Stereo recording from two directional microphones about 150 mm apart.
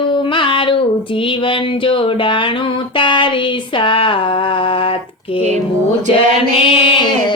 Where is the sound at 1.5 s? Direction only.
35° left (ahead or behind).